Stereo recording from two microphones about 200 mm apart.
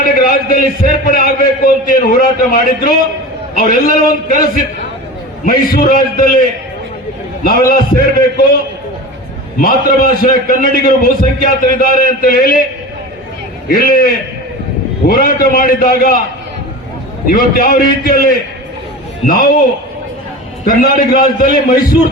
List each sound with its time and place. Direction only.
0.0 s a man's voice: 45° left (ahead or behind)
7.4 s a man's voice: 45° left (ahead or behind)
9.6 s a man's voice: 45° left (ahead or behind)
13.7 s a man's voice: 45° left (ahead or behind)
17.2 s a man's voice: 45° left (ahead or behind)
20.7 s a man's voice: 45° left (ahead or behind)